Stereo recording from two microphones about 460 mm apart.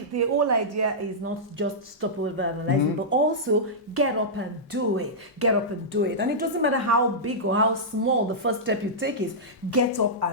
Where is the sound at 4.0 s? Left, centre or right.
Right.